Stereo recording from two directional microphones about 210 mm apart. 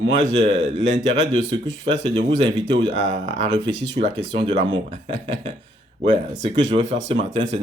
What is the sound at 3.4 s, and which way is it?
Speech, 20° right (ahead or behind).